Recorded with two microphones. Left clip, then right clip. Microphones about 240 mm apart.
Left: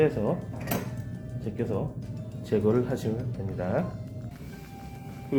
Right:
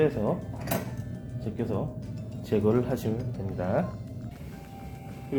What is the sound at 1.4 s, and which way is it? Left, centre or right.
Speech, centre.